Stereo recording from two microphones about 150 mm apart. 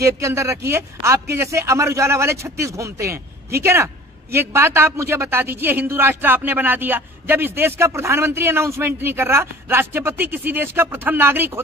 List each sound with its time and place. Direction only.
0.0 s a man's voice: 20° right (ahead or behind)